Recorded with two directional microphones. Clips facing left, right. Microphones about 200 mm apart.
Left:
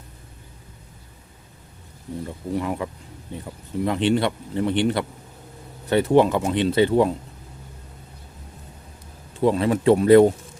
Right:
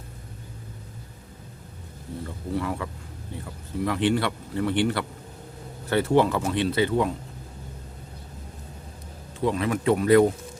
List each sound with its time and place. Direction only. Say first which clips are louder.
2.2 s speech: left 2 dB; 20° left (ahead or behind)
9.4 s speech: left 5 dB; 30° left (ahead or behind)